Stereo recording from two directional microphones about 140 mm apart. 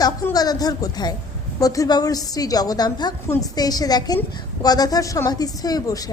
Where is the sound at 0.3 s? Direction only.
25° left (ahead or behind).